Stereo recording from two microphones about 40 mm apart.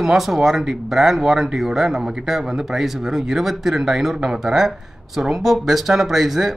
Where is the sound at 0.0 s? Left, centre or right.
Centre.